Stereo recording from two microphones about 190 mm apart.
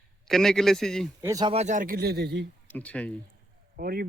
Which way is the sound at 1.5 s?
40° right (ahead or behind).